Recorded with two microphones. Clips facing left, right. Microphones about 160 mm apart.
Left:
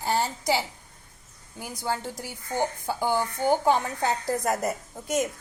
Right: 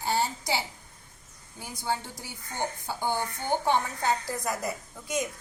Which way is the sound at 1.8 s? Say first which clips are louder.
Left 2 dB; 45° left (ahead or behind).